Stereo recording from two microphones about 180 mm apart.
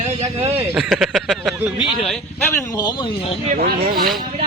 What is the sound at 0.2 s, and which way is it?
Speech, 35° right (ahead or behind).